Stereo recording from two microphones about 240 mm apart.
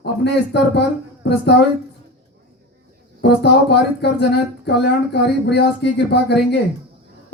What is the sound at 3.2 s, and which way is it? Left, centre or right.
Speech, left.